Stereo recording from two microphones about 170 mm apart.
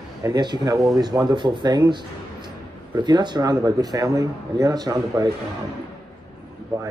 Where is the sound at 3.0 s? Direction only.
25° right (ahead or behind).